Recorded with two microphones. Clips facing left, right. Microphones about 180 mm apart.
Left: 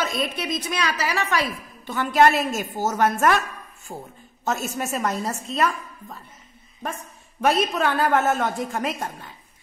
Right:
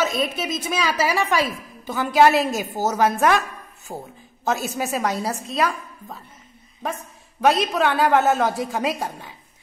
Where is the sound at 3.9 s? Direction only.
15° right (ahead or behind).